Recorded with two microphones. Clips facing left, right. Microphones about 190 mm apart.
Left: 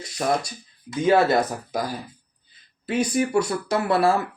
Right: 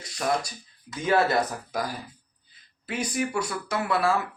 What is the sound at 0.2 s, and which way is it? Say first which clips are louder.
Speech: left 3 dB; 25° left (ahead or behind).